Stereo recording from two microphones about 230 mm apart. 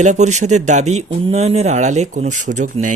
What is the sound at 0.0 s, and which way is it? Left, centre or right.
Speech, right.